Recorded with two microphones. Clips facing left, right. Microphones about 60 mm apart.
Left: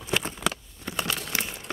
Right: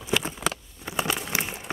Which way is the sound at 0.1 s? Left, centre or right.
Centre.